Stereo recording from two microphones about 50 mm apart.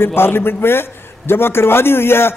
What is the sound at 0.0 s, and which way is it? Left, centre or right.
A man's voice, left.